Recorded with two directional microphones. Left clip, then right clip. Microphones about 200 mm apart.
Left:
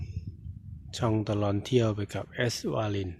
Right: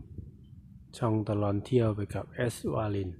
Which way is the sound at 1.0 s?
5° left (ahead or behind).